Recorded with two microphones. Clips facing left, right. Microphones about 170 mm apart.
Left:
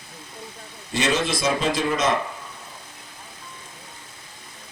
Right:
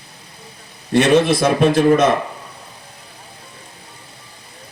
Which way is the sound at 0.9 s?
60° right (ahead or behind).